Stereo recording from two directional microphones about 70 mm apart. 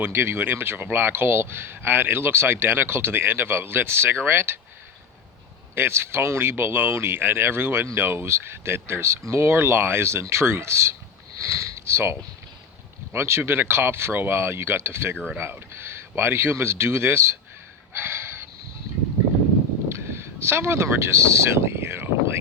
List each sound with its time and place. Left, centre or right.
0.0 s speech: right
5.7 s speech: right
11.3 s sniff: right
13.1 s speech: right
17.9 s gasp: right
19.9 s speech: right